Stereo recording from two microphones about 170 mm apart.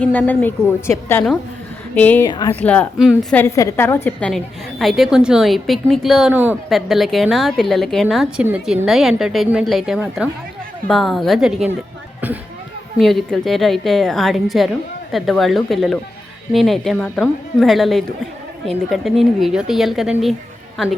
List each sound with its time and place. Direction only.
0.0 s a woman's voice: 10° left (ahead or behind)
2.2 s speech: 25° left (ahead or behind)
2.5 s a woman's voice: 10° left (ahead or behind)
3.0 s a woman's voice: 5° right (ahead or behind)
3.3 s a woman's voice: 15° left (ahead or behind)
4.3 s a woman's voice: centre (ahead or behind)
6.3 s speech: 10° right (ahead or behind)
6.7 s a woman's voice: centre (ahead or behind)
13.0 s a woman's voice: centre (ahead or behind)